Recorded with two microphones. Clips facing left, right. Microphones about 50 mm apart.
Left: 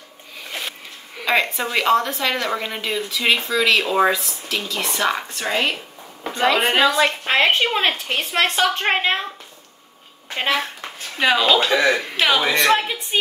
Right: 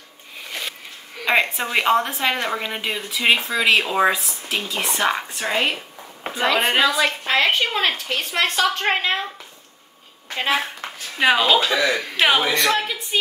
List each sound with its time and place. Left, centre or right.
1.2 s a woman's voice: centre
3.8 s speech: centre
4.1 s speech: centre
5.4 s a woman's voice: centre
6.4 s speech: centre
7.1 s a woman's voice: left
11.1 s a woman's voice: centre
11.6 s a woman's voice: left
12.2 s a woman's voice: centre
12.5 s a woman's voice: left